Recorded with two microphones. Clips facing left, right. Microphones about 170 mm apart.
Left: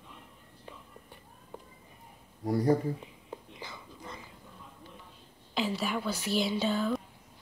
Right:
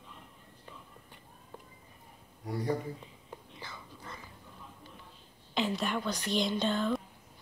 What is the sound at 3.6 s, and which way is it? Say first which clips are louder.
Whispering: left 2 dB; 15° left (ahead or behind).